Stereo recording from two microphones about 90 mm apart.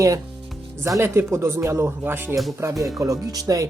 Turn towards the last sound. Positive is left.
turn(degrees=-45)  # may be behind; listen again after turning